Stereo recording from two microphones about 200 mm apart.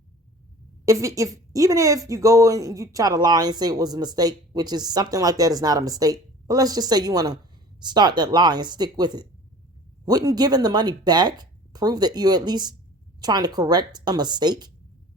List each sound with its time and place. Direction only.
0.9 s a woman's voice: 15° right (ahead or behind)